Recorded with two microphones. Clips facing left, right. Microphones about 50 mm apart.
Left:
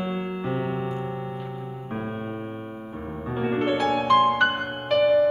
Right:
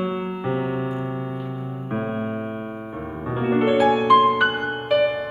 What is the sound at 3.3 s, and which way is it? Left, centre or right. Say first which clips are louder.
Music: right 5 dB; centre.